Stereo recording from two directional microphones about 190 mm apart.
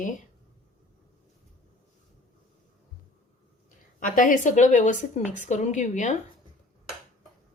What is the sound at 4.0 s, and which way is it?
Speech, 45° left (ahead or behind).